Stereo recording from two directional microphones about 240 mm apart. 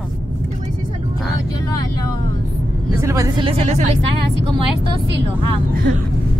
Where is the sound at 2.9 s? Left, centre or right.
Centre.